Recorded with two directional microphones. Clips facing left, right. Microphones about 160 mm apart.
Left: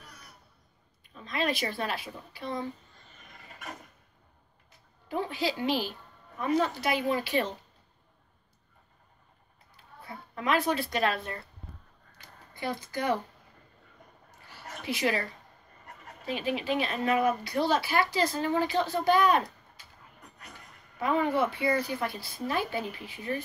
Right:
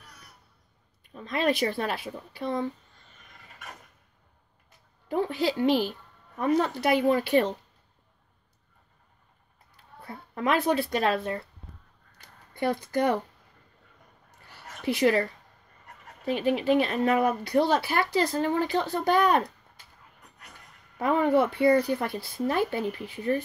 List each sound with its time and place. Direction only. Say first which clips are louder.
1.0 s speech: right 5 dB; 50° right (ahead or behind)
5.0 s speech: right 4 dB; 55° right (ahead or behind)
10.0 s speech: right 3 dB; 55° right (ahead or behind)
12.5 s speech: right 7 dB; 60° right (ahead or behind)
14.9 s speech: right 7 dB; 55° right (ahead or behind)
16.3 s speech: right 6 dB; 50° right (ahead or behind)
21.0 s speech: right 4 dB; 55° right (ahead or behind)